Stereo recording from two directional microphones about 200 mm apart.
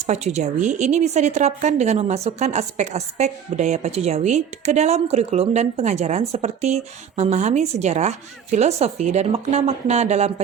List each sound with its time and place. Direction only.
0.0 s a woman's voice: 35° right (ahead or behind)